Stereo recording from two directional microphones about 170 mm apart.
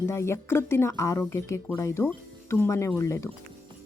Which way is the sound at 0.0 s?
15° left (ahead or behind).